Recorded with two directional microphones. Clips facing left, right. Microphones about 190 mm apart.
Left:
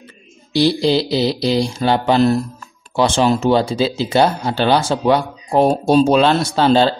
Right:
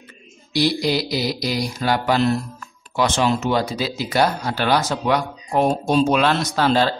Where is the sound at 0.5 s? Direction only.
30° left (ahead or behind).